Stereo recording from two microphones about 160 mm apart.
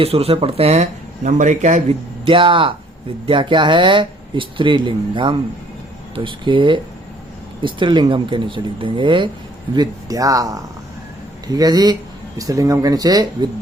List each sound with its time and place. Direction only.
0.0 s speech: 35° right (ahead or behind)
2.2 s speech: 30° right (ahead or behind)